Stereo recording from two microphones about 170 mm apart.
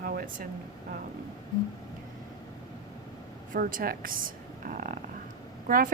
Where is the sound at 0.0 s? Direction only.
60° right (ahead or behind).